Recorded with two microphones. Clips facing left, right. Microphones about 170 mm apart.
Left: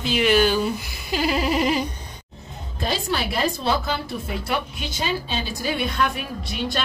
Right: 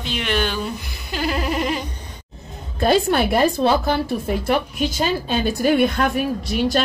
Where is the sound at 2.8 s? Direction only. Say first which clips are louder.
Right 9 dB; 55° right (ahead or behind).